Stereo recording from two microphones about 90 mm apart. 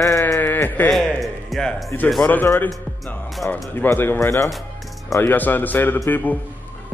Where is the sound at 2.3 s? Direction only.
20° left (ahead or behind).